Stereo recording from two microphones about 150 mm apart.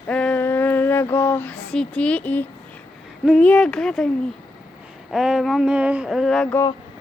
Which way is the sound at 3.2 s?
Centre (ahead or behind).